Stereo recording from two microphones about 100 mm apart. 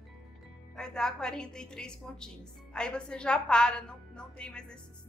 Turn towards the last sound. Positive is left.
turn(degrees=10)  # may be behind; listen again after turning